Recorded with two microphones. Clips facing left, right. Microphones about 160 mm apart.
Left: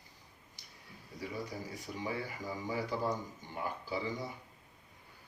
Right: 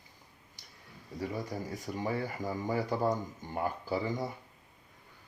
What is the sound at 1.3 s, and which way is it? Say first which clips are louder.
Speech: right 4 dB; 45° right (ahead or behind).